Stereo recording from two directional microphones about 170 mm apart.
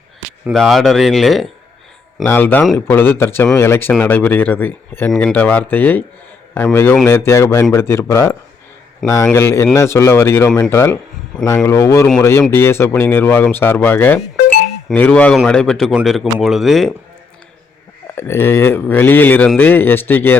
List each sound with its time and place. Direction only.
0.5 s a man's voice: centre (ahead or behind)
2.2 s a man's voice: 10° left (ahead or behind)
18.1 s speech: 15° left (ahead or behind)